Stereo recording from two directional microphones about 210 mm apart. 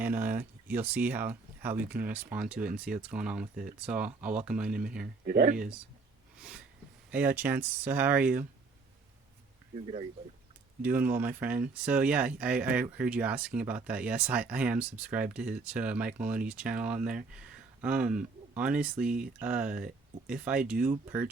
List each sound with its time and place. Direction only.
0.0 s speech: 10° right (ahead or behind)
5.3 s speech: 45° right (ahead or behind)
5.5 s speech: 5° right (ahead or behind)
7.1 s speech: 10° right (ahead or behind)
9.7 s speech: 30° right (ahead or behind)
10.8 s speech: 10° right (ahead or behind)